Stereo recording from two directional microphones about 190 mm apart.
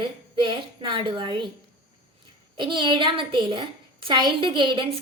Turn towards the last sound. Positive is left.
turn(degrees=-25)  # may be behind; listen again after turning